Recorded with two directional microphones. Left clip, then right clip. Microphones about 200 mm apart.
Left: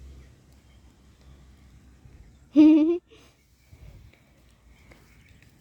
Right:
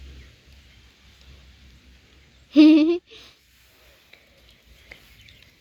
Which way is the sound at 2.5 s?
10° left (ahead or behind).